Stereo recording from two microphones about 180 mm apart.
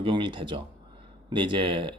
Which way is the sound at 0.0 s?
30° right (ahead or behind).